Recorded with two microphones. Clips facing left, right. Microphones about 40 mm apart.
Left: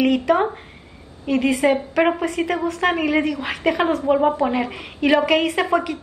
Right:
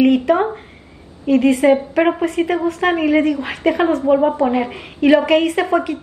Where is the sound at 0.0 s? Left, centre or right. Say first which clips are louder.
Right 4 dB; centre.